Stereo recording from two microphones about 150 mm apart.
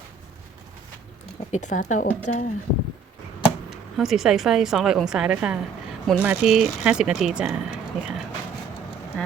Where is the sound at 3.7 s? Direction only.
Centre (ahead or behind).